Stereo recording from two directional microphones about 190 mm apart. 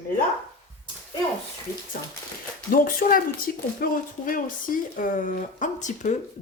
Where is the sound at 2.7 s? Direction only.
50° left (ahead or behind).